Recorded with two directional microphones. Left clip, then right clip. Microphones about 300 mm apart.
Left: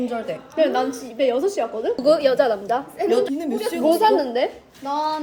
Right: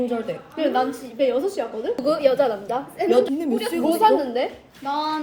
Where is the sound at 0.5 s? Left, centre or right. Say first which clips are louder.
Left 2 dB; left.